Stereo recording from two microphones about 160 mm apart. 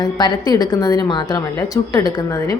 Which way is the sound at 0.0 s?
25° left (ahead or behind).